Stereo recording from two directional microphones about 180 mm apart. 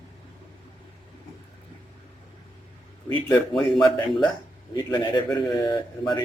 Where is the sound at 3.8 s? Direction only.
20° left (ahead or behind).